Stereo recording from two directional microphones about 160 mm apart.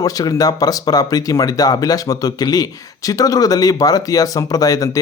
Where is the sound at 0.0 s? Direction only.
20° left (ahead or behind).